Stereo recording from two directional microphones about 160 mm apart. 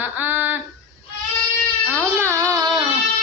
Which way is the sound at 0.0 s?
10° right (ahead or behind).